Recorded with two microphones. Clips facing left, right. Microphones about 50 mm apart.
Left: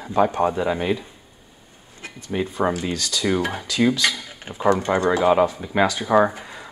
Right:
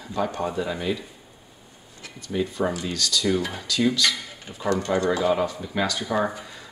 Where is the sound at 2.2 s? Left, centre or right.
Left.